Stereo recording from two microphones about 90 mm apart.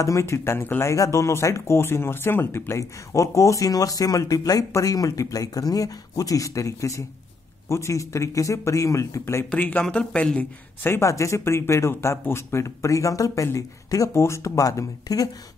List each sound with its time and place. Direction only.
0.0 s a man's voice: 35° left (ahead or behind); by 10.9 s 15° left (ahead or behind)
10.9 s speech: 30° left (ahead or behind)